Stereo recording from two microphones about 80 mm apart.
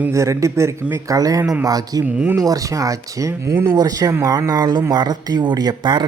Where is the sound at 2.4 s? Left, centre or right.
Right.